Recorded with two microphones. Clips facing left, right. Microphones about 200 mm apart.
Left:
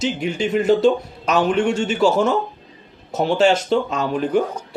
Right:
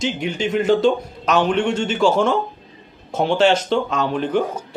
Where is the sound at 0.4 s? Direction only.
40° left (ahead or behind).